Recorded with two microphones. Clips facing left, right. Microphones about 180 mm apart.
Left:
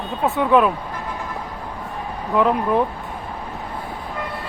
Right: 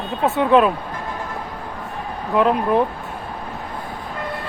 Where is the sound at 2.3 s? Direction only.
20° right (ahead or behind).